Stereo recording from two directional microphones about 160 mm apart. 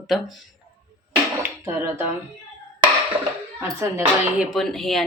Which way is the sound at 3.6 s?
15° right (ahead or behind).